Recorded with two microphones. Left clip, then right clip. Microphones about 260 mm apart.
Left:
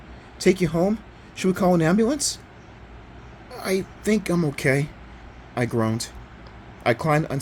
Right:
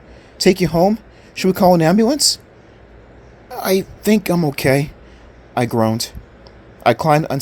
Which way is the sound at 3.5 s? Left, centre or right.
Right.